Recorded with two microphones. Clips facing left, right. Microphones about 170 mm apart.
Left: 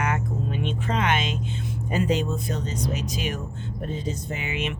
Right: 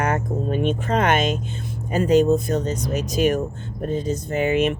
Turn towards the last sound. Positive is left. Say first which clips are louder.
# right 10 dB
turn(degrees=-45)  # may be behind; listen again after turning